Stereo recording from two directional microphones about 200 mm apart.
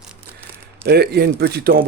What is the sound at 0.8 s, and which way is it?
Speech, 55° right (ahead or behind).